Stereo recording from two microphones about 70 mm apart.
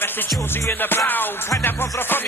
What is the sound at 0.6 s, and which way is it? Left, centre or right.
Music, left.